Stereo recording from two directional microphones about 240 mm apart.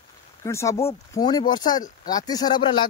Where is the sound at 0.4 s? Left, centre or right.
Centre.